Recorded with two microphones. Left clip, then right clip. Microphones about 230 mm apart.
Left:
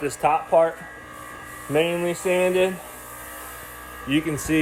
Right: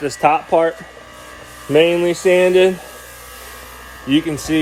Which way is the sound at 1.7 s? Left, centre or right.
Right.